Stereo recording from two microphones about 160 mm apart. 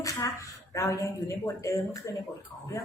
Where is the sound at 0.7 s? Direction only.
20° left (ahead or behind).